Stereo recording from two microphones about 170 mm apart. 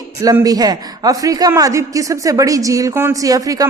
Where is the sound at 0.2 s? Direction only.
20° right (ahead or behind).